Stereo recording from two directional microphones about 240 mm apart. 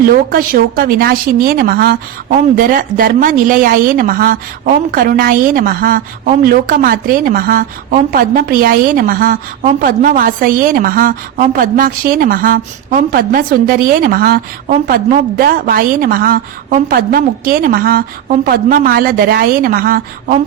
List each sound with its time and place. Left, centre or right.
0.1 s a woman's voice: right